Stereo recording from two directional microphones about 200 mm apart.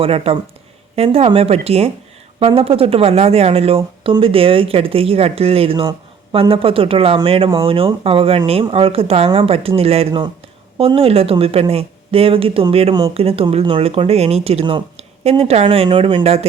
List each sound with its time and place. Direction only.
0.0 s a woman's voice: 30° right (ahead or behind)